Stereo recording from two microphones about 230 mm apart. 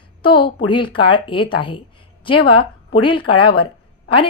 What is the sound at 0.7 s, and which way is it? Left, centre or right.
Speech, left.